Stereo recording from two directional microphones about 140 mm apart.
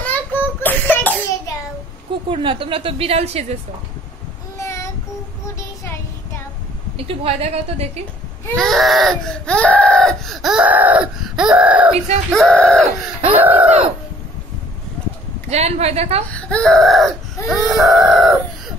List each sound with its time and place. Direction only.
0.1 s a sound: 15° left (ahead or behind)
2.2 s a woman's voice: 40° right (ahead or behind)
4.6 s child singing: 20° left (ahead or behind)
7.0 s a woman's voice: 45° right (ahead or behind)
8.5 s baby cry: centre (ahead or behind)
12.3 s baby cry: centre (ahead or behind)
13.4 s a sound: 15° right (ahead or behind)
15.5 s a woman's voice: 50° right (ahead or behind)
16.3 s baby cry: 10° left (ahead or behind)